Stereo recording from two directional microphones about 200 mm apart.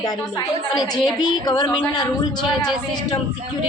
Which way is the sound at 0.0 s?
20° left (ahead or behind).